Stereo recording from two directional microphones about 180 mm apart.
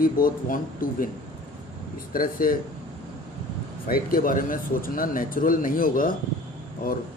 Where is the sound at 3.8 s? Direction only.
50° left (ahead or behind).